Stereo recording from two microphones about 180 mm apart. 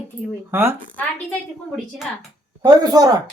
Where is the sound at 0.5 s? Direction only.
15° right (ahead or behind).